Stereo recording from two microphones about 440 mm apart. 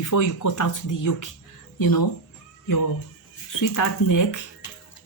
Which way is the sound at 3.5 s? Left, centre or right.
Left.